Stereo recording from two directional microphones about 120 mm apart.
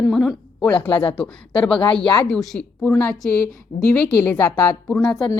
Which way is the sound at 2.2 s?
5° left (ahead or behind).